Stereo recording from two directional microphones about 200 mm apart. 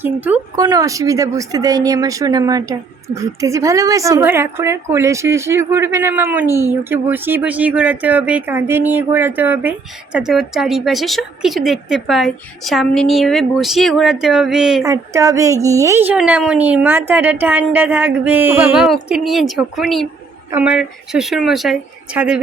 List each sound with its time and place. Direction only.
0.0 s a woman's voice: 10° right (ahead or behind)
14.8 s a woman's voice: 15° right (ahead or behind)